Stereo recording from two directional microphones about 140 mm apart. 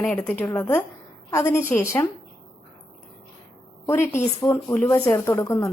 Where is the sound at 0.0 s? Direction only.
10° left (ahead or behind).